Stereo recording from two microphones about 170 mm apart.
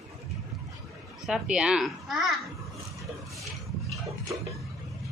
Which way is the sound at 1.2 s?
5° right (ahead or behind).